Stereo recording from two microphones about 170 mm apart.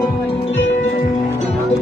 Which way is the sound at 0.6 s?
90° left.